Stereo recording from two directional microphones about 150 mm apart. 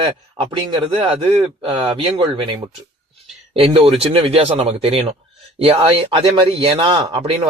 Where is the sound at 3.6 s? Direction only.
40° right (ahead or behind).